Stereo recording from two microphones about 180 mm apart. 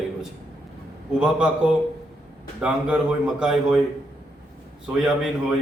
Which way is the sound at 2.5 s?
5° right (ahead or behind).